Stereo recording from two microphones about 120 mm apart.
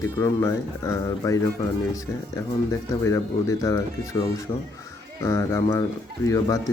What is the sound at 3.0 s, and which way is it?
Speech, 25° left (ahead or behind).